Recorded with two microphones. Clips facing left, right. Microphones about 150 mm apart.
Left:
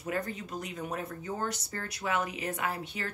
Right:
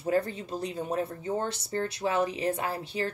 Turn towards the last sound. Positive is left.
turn(degrees=-30)  # may be behind; listen again after turning